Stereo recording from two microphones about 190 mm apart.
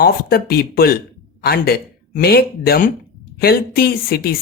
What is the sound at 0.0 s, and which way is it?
A woman's voice, 55° left (ahead or behind).